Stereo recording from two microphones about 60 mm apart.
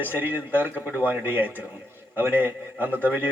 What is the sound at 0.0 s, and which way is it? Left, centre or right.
A man's voice, right.